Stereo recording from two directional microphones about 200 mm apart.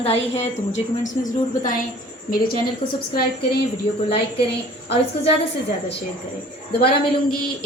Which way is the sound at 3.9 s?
30° left (ahead or behind).